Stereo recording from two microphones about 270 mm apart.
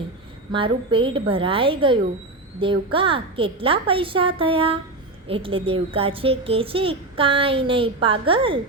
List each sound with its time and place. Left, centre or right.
0.5 s a child's voice: centre